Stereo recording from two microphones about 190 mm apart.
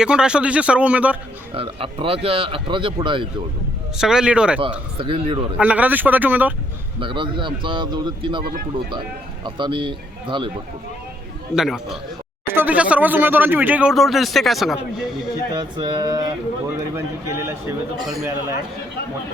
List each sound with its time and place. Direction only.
0.0 s speech: 5° right (ahead or behind)
1.5 s speech: 30° right (ahead or behind)
3.9 s speech: 5° right (ahead or behind)
4.9 s speech: 30° right (ahead or behind)
5.5 s speech: 5° right (ahead or behind)
7.0 s speech: 25° right (ahead or behind)
8.4 s speech: 50° right (ahead or behind)
9.4 s speech: 25° right (ahead or behind)
11.5 s speech: centre (ahead or behind)
15.5 s speech: 20° right (ahead or behind)